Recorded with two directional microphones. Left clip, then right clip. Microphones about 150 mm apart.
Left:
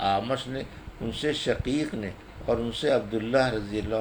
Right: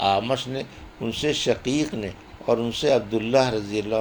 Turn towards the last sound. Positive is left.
turn(degrees=-35)  # may be behind; listen again after turning